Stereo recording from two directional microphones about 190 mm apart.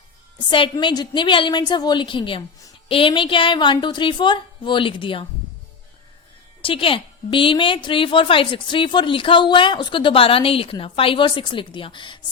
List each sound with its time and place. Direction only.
0.5 s a woman's voice: 25° left (ahead or behind)
6.6 s a woman's voice: 30° left (ahead or behind)